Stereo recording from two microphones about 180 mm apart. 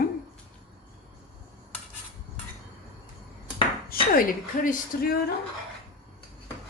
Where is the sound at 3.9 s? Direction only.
50° left (ahead or behind).